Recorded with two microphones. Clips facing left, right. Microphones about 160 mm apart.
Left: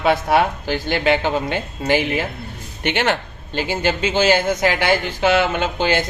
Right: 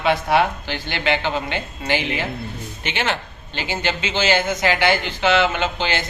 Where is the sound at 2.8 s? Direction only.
65° left (ahead or behind).